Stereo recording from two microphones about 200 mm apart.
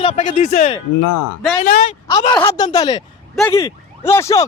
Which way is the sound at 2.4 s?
15° left (ahead or behind).